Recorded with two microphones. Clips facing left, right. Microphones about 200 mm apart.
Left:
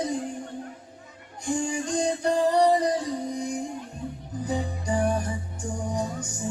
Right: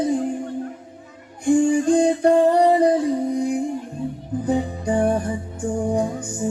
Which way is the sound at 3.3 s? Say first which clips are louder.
Right 8 dB; 55° right (ahead or behind).